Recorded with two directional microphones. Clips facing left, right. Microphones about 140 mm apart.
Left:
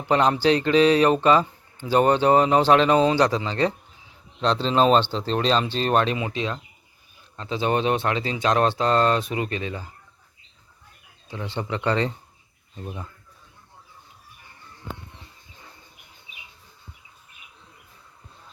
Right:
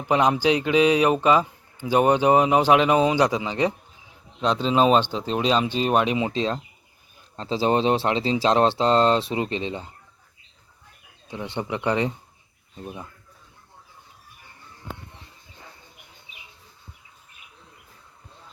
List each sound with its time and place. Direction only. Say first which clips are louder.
0.0 s a man's voice: even; 10° right (ahead or behind)
6.1 s speech: right 4 dB; 25° right (ahead or behind)
11.3 s a man's voice: right 1 dB; 20° right (ahead or behind)